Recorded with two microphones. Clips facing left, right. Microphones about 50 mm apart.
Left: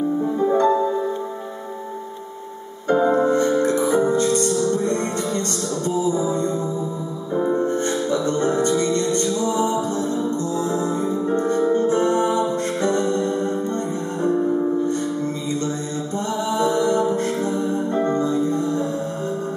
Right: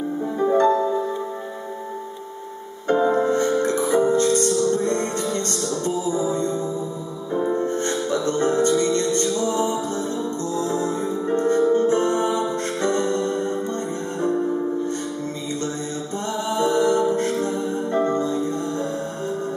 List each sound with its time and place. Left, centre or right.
0.2 s music: centre
2.9 s music: centre
4.2 s music: left
4.5 s music: centre
4.8 s music: centre
7.5 s music: centre
10.7 s music: left
11.6 s music: centre
11.9 s music: centre
14.2 s music: centre
16.4 s music: centre
18.0 s music: left